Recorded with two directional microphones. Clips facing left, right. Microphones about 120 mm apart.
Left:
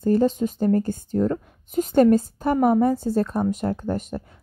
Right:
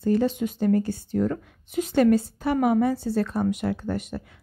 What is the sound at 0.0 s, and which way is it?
A woman's voice, 40° left (ahead or behind).